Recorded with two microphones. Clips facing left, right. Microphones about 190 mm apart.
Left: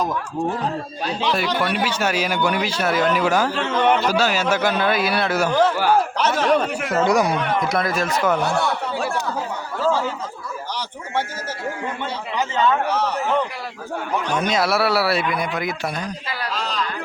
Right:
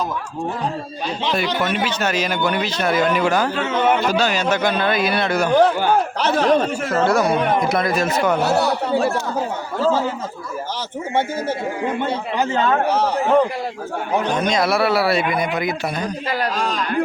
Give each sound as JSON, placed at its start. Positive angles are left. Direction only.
{"t": 1.5, "sound": "speech", "side_deg": -20}
{"t": 1.7, "sound": "a man's voice", "side_deg": 10}
{"t": 3.5, "sound": "a man's voice", "side_deg": -5}
{"t": 4.2, "sound": "a man's voice", "side_deg": 5}
{"t": 6.1, "sound": "speech", "side_deg": -35}
{"t": 6.8, "sound": "a man's voice", "side_deg": 15}
{"t": 7.4, "sound": "a man's voice", "side_deg": -50}
{"t": 7.7, "sound": "speech", "side_deg": 0}
{"t": 11.1, "sound": "speech", "side_deg": -55}
{"t": 12.0, "sound": "a man's voice", "side_deg": -45}
{"t": 13.0, "sound": "speech", "side_deg": -30}
{"t": 14.3, "sound": "speech", "side_deg": 5}
{"t": 16.3, "sound": "a sound", "side_deg": -50}